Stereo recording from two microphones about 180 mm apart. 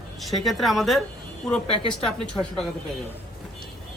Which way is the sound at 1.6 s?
30° left (ahead or behind).